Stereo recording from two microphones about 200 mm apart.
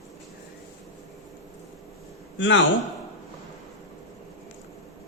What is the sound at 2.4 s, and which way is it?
Speech, 70° left (ahead or behind).